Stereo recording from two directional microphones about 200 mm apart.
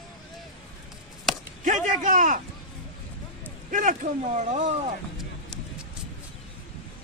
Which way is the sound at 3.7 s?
40° right (ahead or behind).